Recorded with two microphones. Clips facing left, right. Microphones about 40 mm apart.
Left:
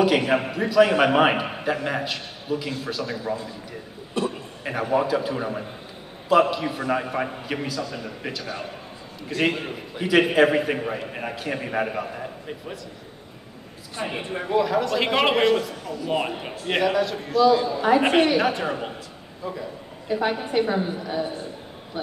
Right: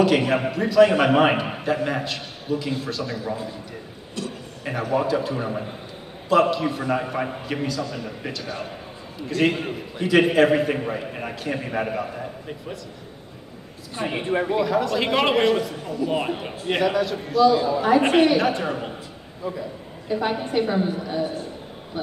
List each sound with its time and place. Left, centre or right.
0.3 s a man's voice: centre
4.2 s a sound: left
4.6 s a man's voice: centre
13.9 s a man's voice: centre
15.8 s speech: centre
16.1 s a man's voice: centre